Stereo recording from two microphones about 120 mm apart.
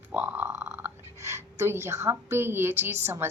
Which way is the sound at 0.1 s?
15° right (ahead or behind).